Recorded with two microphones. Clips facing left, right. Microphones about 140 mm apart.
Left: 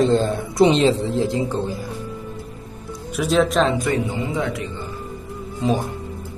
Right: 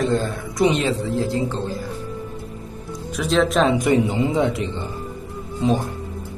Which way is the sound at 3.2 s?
5° left (ahead or behind).